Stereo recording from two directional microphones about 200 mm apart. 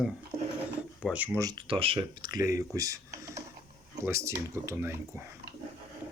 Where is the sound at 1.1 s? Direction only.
10° right (ahead or behind).